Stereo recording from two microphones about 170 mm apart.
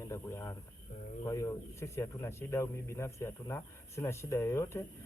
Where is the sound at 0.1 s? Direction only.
15° left (ahead or behind).